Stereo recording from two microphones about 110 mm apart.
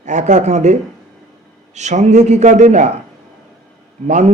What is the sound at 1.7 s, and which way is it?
A man's voice, 90° right.